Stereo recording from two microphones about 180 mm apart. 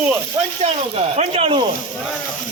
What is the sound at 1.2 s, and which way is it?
Speech, 30° right (ahead or behind).